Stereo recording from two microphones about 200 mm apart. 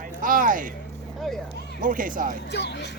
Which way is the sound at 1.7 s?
40° right (ahead or behind).